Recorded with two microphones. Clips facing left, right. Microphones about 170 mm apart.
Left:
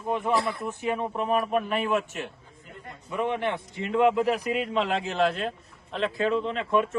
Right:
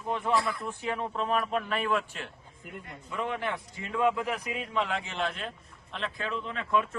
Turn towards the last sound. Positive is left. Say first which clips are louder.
# left 4 dB
turn(degrees=25)  # may be behind; listen again after turning